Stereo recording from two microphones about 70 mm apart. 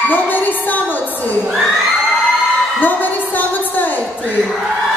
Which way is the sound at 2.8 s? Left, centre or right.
Left.